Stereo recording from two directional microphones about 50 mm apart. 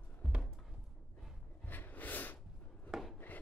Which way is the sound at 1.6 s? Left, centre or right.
Left.